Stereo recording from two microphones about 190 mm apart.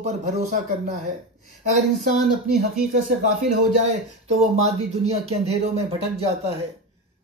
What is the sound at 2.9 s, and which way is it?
Speech, 40° right (ahead or behind).